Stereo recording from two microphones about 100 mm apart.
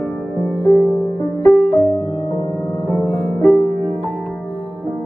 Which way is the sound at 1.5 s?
20° right (ahead or behind).